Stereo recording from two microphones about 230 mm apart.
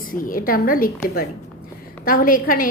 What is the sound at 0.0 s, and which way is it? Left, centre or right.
A woman's voice, left.